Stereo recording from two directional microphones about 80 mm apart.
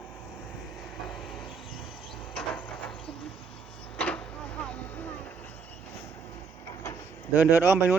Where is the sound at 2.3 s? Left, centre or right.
Centre.